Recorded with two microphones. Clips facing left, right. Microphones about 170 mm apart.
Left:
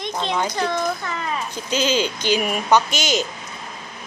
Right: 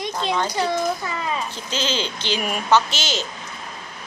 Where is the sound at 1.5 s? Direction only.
10° left (ahead or behind).